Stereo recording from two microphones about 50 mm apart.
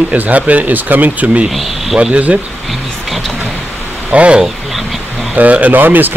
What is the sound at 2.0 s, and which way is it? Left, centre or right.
Speech, right.